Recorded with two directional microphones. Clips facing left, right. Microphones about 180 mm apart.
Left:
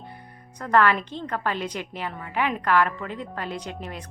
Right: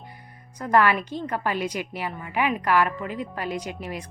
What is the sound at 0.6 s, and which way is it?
A woman's voice, 10° right (ahead or behind).